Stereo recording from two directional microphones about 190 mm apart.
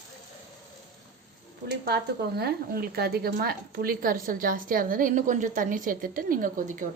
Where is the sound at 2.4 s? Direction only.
55° right (ahead or behind).